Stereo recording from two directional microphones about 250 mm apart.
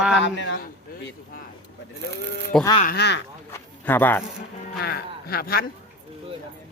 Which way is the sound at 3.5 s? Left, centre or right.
Centre.